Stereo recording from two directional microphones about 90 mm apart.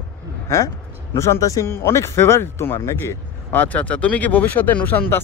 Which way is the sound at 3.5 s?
15° left (ahead or behind).